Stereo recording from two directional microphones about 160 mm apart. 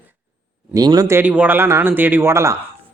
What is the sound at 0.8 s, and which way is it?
Speech, 25° right (ahead or behind).